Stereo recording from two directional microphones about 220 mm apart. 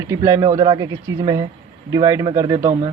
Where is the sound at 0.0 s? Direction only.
15° right (ahead or behind).